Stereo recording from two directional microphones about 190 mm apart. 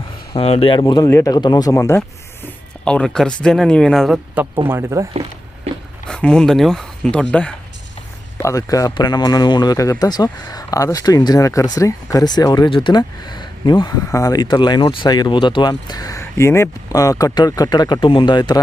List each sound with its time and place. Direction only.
0.3 s speech: 30° left (ahead or behind); by 4.4 s centre (ahead or behind)
4.7 s speech: 15° right (ahead or behind)
6.1 s speech: 5° left (ahead or behind); by 18.6 s 20° left (ahead or behind)